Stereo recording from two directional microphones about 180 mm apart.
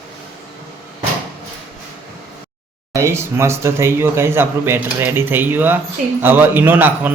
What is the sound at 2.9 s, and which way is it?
Speech, 15° right (ahead or behind).